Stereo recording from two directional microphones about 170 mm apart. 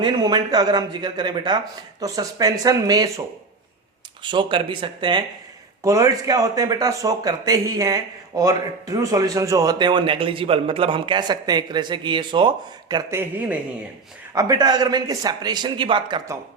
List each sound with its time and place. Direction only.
0.0 s speech: 25° right (ahead or behind)
4.2 s speech: 30° right (ahead or behind)
5.8 s speech: 20° right (ahead or behind)
14.3 s speech: 25° right (ahead or behind)